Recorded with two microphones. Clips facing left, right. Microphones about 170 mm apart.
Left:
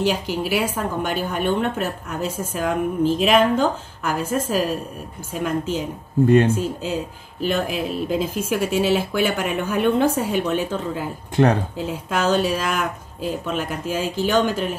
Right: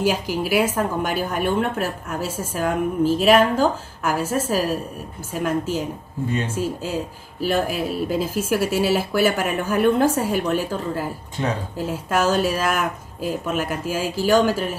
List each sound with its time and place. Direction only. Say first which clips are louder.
0.0 s speech: even; 10° right (ahead or behind)
6.2 s speech: left 10 dB; 60° left (ahead or behind)
6.5 s speech: left 1 dB; 5° right (ahead or behind)
11.4 s speech: left 8 dB; 90° left
11.7 s speech: right 2 dB; 10° right (ahead or behind)